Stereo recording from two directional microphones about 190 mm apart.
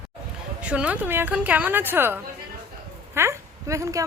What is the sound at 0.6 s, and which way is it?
A woman's voice, 5° right (ahead or behind).